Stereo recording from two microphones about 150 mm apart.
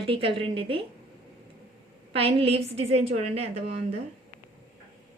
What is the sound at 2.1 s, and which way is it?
A woman's voice, 40° right (ahead or behind).